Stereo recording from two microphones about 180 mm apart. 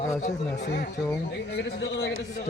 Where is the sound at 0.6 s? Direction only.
70° left (ahead or behind).